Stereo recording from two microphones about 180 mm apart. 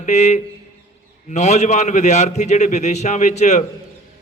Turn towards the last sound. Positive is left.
turn(degrees=40)  # may be behind; listen again after turning